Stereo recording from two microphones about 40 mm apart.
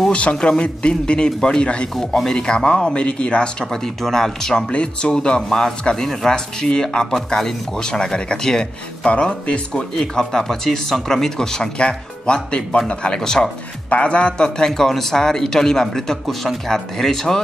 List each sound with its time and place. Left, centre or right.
0.1 s a man's voice: left
2.0 s a man's voice: centre; by 3.4 s left
3.7 s a man's voice: centre
4.6 s a man's voice: left
9.0 s a man's voice: left
9.9 s a man's voice: centre
13.2 s a man's voice: centre
13.8 s a man's voice: left
14.7 s a man's voice: centre